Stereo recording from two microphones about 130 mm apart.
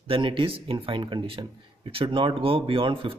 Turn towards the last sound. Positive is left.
turn(degrees=-40)  # may be behind; listen again after turning